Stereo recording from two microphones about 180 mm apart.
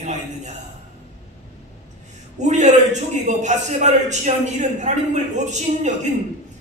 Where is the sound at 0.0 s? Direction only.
40° right (ahead or behind).